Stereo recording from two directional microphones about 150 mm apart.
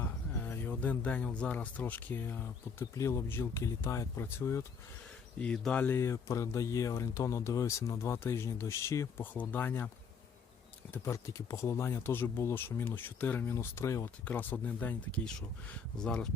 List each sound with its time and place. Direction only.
0.0 s speech: 15° left (ahead or behind)
10.9 s speech: 20° left (ahead or behind)